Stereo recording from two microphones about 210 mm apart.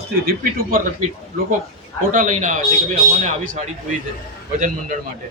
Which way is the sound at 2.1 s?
35° right (ahead or behind).